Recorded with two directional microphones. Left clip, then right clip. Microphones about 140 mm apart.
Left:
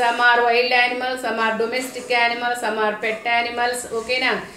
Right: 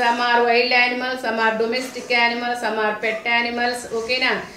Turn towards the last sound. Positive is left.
turn(degrees=20)  # may be behind; listen again after turning